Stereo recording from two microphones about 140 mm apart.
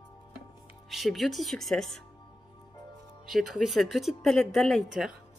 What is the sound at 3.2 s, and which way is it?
Speech, centre (ahead or behind).